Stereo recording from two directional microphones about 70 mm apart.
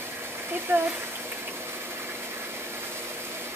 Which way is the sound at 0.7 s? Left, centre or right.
Right.